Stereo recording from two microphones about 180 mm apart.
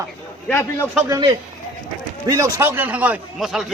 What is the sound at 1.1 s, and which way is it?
A man's voice, 25° right (ahead or behind).